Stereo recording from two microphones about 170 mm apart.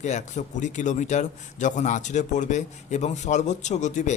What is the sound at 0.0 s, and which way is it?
A man's voice, 45° left (ahead or behind).